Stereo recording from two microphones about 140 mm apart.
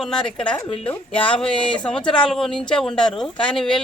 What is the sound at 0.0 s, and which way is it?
A child's voice, 5° left (ahead or behind).